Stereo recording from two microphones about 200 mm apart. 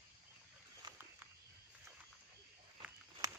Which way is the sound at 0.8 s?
20° right (ahead or behind).